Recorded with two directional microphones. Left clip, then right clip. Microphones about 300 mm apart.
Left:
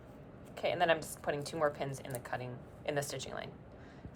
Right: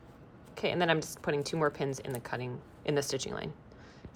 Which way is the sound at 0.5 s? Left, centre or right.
Right.